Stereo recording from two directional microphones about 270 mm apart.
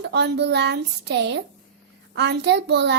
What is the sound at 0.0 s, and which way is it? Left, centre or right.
A child's voice, right.